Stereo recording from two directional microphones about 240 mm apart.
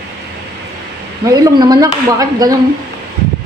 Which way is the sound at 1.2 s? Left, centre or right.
Centre.